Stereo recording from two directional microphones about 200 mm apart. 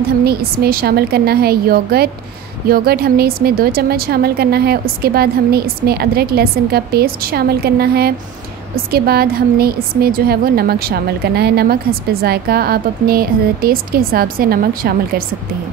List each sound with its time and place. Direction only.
0.2 s a woman's voice: 50° right (ahead or behind)